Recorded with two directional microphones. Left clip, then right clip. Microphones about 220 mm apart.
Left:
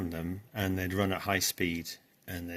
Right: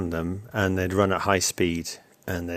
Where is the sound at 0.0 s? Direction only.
55° right (ahead or behind).